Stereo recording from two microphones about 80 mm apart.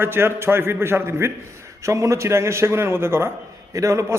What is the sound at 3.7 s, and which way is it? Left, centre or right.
Speech, right.